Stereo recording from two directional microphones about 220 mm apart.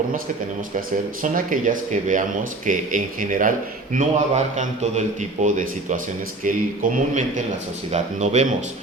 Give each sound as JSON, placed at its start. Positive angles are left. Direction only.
{"t": 1.2, "sound": "a man's voice", "side_deg": -35}